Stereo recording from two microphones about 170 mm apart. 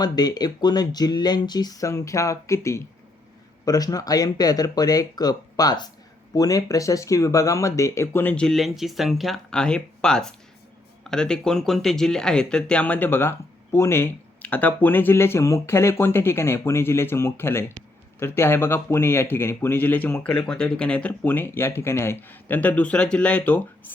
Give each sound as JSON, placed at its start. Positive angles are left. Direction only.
{"t": 0.0, "sound": "speech", "side_deg": 25}